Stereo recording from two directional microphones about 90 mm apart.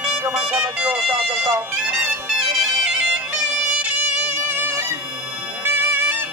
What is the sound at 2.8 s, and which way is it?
Bagpipes, 10° right (ahead or behind).